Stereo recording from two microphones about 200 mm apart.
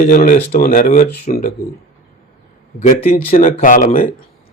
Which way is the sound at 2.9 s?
40° left (ahead or behind).